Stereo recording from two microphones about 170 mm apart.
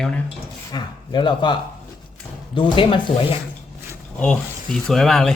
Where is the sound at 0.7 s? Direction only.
25° left (ahead or behind).